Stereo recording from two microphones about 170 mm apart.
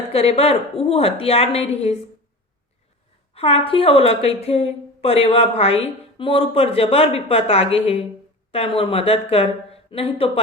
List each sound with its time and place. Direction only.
0.1 s a woman's voice: 35° left (ahead or behind)
3.3 s a woman's voice: 35° left (ahead or behind)